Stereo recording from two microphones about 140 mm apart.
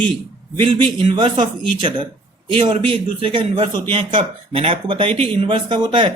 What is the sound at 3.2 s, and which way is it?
Speech, 40° right (ahead or behind).